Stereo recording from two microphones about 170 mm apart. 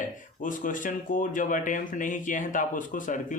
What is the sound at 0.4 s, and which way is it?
Speech, 50° left (ahead or behind).